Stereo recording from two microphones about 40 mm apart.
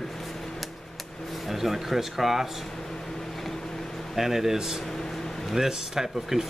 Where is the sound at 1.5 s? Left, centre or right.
Centre.